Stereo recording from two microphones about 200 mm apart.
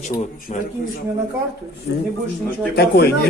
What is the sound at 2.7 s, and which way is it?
Speech, 55° left (ahead or behind).